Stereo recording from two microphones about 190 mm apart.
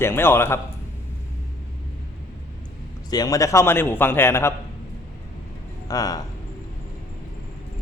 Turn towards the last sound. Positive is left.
turn(degrees=20)  # may be behind; listen again after turning